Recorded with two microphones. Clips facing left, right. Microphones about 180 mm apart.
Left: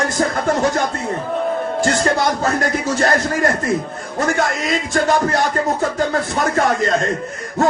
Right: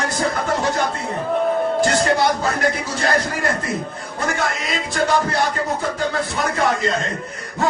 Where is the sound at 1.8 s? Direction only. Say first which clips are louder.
Left 2 dB; 45° left (ahead or behind).